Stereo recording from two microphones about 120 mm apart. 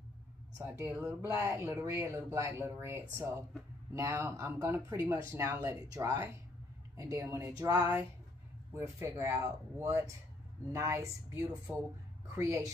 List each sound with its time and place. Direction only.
0.6 s speech: 20° right (ahead or behind)
7.5 s a sound: 30° right (ahead or behind)
8.7 s speech: 20° right (ahead or behind)